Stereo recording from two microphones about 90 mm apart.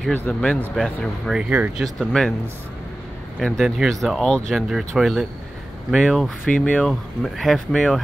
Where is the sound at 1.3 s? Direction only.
15° right (ahead or behind).